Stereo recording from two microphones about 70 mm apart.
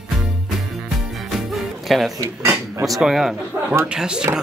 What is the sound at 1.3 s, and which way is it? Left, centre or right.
Music, centre.